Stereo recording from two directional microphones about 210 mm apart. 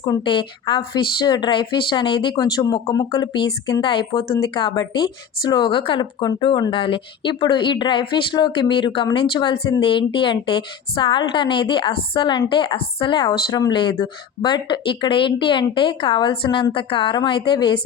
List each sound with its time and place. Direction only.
0.0 s a woman's voice: 20° left (ahead or behind)